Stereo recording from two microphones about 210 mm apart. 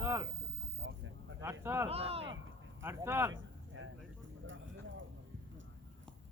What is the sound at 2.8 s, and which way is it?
Speech, 10° right (ahead or behind).